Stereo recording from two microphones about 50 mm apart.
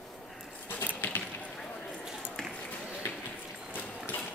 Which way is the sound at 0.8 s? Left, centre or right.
Left.